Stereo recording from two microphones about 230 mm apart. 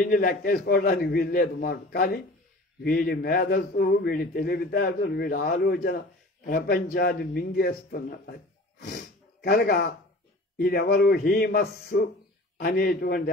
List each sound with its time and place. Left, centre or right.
0.0 s a man's voice: left